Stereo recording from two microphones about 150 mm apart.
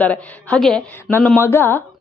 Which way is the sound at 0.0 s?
10° left (ahead or behind).